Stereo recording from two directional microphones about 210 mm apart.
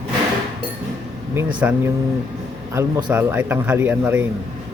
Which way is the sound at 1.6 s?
10° right (ahead or behind).